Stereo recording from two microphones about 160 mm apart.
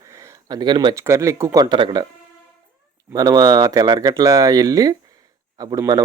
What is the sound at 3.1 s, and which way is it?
Speech, 20° right (ahead or behind).